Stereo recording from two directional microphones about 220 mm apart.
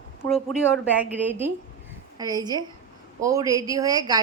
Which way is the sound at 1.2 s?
10° right (ahead or behind).